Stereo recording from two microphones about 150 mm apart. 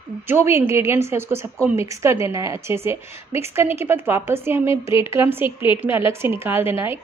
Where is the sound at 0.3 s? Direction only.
15° right (ahead or behind).